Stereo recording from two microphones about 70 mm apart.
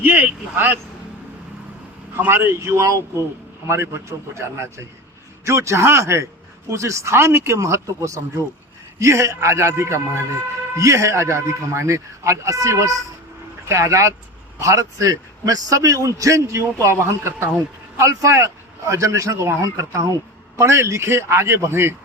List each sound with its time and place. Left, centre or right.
0.0 s speech: right
2.1 s a man's voice: right
17.9 s a man's voice: right